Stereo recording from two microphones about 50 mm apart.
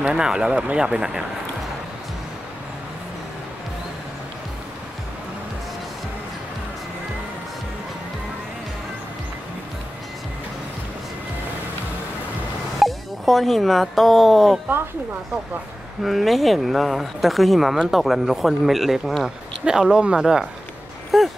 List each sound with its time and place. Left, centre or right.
0.1 s speech: centre
12.7 s speech: centre
16.0 s speech: centre
21.1 s a sound: centre